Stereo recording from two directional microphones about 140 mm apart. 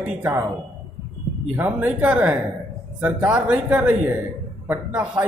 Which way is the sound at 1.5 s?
10° right (ahead or behind).